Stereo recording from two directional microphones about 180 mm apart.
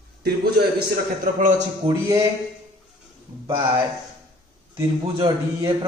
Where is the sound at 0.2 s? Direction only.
60° right (ahead or behind).